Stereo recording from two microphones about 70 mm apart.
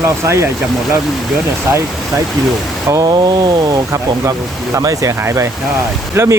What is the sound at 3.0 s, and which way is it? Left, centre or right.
Speech, right.